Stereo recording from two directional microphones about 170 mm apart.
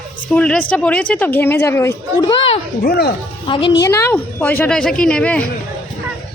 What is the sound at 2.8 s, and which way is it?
Speech, 65° left (ahead or behind).